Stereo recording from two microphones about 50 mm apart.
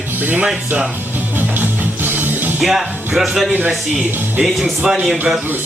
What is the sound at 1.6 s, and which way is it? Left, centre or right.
Music, right.